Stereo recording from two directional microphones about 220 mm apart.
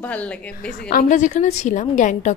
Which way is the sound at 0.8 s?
40° left (ahead or behind).